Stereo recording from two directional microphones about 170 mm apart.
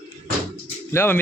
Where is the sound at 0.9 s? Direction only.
15° left (ahead or behind).